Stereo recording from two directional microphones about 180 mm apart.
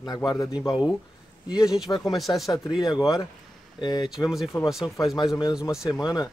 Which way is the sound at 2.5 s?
20° left (ahead or behind).